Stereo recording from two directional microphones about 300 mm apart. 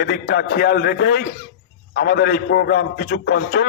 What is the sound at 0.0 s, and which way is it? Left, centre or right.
A man's voice, left.